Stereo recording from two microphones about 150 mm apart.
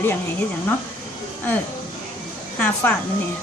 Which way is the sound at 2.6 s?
15° left (ahead or behind).